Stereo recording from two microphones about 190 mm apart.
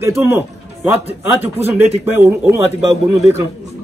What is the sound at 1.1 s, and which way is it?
Speech, 35° right (ahead or behind).